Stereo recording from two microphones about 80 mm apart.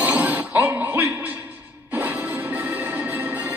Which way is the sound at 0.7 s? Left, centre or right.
Right.